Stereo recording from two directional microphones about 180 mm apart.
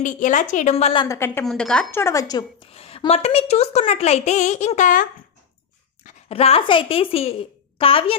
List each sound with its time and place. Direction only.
0.0 s a woman's voice: 45° left (ahead or behind)
1.0 s a woman's voice: 15° left (ahead or behind)
1.5 s a woman's voice: 5° left (ahead or behind); by 2.6 s 20° left (ahead or behind)
2.7 s a woman's voice: 35° left (ahead or behind)
6.0 s a sound: 45° left (ahead or behind)
6.3 s a woman's voice: 35° left (ahead or behind)